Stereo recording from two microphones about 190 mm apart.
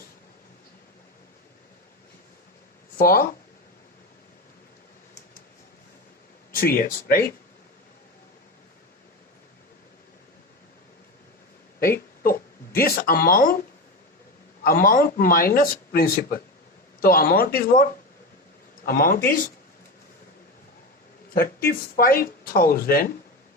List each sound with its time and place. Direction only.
3.0 s speech: 50° left (ahead or behind)
6.5 s speech: 50° left (ahead or behind)
11.8 s a sound: 50° left (ahead or behind)
14.6 s speech: 50° left (ahead or behind)
18.9 s speech: 50° left (ahead or behind)
21.3 s speech: 50° left (ahead or behind)